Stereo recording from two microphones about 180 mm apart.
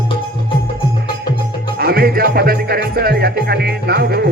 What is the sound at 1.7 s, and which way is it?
Music, 60° right (ahead or behind).